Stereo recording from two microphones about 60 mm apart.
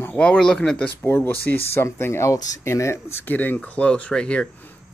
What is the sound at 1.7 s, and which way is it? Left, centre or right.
Speech, left.